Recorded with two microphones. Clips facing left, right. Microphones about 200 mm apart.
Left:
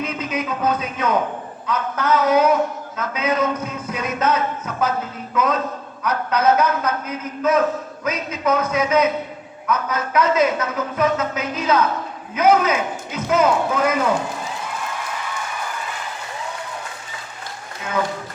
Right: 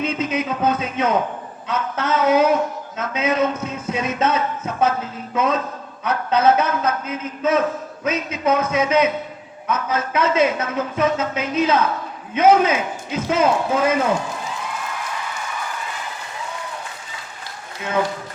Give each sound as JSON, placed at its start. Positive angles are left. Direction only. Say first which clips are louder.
{"t": 0.0, "sound": "a man's voice", "louder": "right 3 dB", "side_deg": -25}